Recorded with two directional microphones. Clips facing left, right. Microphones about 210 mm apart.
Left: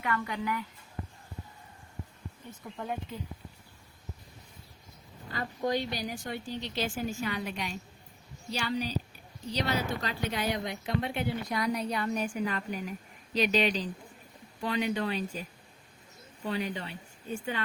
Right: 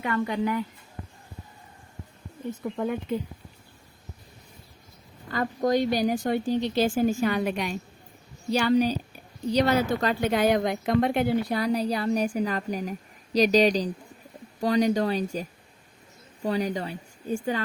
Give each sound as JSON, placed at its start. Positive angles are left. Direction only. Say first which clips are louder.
{"t": 0.0, "sound": "speech", "louder": "right 7 dB", "side_deg": -25}
{"t": 2.7, "sound": "speech", "louder": "right 8 dB", "side_deg": -70}
{"t": 5.3, "sound": "speech", "louder": "right 7 dB", "side_deg": -45}
{"t": 11.5, "sound": "a woman's voice", "louder": "right 6 dB", "side_deg": -35}